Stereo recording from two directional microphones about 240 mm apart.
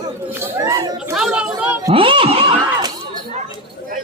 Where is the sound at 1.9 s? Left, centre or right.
Right.